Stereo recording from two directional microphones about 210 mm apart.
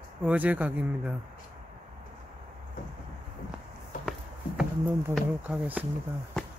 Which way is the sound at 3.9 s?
40° left (ahead or behind).